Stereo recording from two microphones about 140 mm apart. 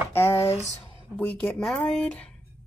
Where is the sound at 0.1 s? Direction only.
15° left (ahead or behind).